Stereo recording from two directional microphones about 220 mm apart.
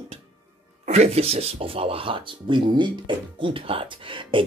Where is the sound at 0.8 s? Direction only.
30° right (ahead or behind).